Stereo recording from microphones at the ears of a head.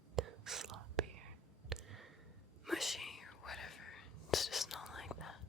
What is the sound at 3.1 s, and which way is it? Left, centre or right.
Whispering, left.